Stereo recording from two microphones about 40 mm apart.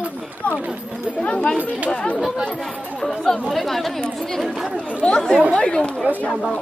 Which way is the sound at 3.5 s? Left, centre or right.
Centre.